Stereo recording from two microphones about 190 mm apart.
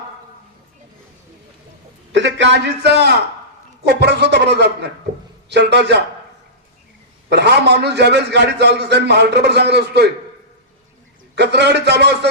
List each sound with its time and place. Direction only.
2.1 s a man's voice: 70° right (ahead or behind)
7.3 s a man's voice: 65° right (ahead or behind)
11.3 s a man's voice: 60° right (ahead or behind)